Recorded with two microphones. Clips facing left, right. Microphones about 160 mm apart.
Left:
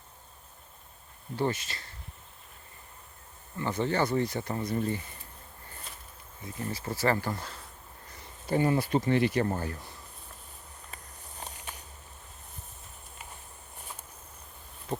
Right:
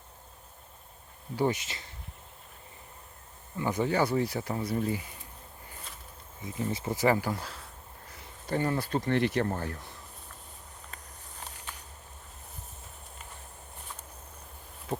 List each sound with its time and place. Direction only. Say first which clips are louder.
1.4 s speech: right 2 dB; 20° right (ahead or behind)
3.6 s speech: right 1 dB; 10° right (ahead or behind)
6.4 s speech: right 3 dB; 20° right (ahead or behind); by 7.7 s 5° right (ahead or behind)
8.4 s speech: left 3 dB; 10° left (ahead or behind)
10.9 s walk: left 1 dB; 5° left (ahead or behind)
11.3 s a sound: left 2 dB; 20° left (ahead or behind)
14.9 s a sound: even; 5° right (ahead or behind)